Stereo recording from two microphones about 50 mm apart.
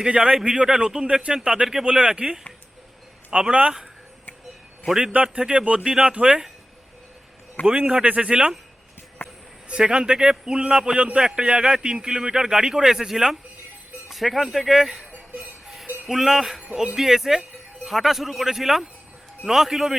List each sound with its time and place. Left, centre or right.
0.0 s a man's voice: centre
5.1 s speech: right
7.6 s a man's voice: left
8.0 s speech: right
9.2 s a sound: left
9.6 s a man's voice: centre
14.1 s a man's voice: centre
15.1 s a sound: right
15.6 s cowbell: centre
16.0 s a man's voice: centre